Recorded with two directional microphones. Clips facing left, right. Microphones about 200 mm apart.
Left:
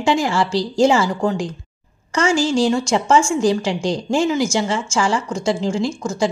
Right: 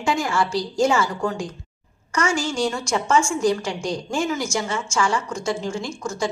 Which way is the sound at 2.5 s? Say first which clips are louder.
Left 6 dB; 30° left (ahead or behind).